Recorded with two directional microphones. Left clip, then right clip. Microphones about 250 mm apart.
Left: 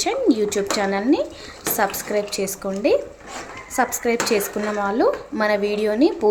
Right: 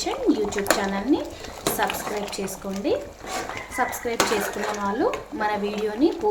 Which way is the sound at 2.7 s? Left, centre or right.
Left.